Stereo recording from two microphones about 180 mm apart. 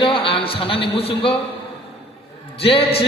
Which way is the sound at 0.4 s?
30° left (ahead or behind).